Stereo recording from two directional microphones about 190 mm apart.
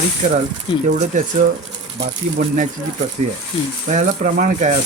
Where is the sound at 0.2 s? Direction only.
40° right (ahead or behind).